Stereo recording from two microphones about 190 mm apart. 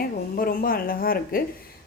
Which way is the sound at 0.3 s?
50° left (ahead or behind).